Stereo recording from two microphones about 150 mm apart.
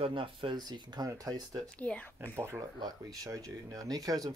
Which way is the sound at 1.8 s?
10° left (ahead or behind).